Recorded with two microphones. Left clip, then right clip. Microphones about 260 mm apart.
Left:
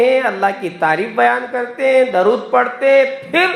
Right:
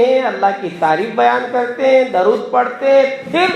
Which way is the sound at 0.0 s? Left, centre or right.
Left.